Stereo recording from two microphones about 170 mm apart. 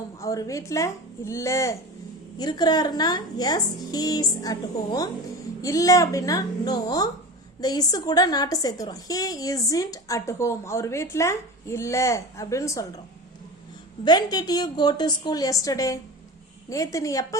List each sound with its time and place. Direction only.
0.2 s a woman's voice: 20° left (ahead or behind)
14.0 s speech: 25° left (ahead or behind)